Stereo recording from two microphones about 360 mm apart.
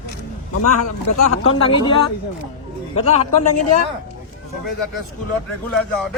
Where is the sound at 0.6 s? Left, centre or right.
Left.